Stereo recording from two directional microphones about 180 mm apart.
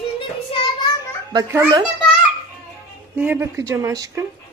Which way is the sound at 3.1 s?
10° right (ahead or behind).